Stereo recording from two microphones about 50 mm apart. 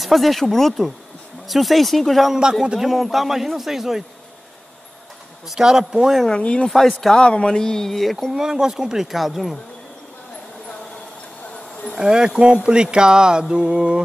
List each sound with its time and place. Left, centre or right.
0.0 s a man's voice: centre
2.6 s speech: centre
2.9 s a man's voice: centre
5.5 s speech: centre
6.3 s speech: left
6.7 s a man's voice: centre
7.2 s speech: centre
8.4 s speech: centre
12.0 s speech: centre